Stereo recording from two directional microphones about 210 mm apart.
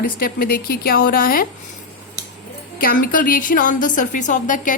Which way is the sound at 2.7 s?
45° left (ahead or behind).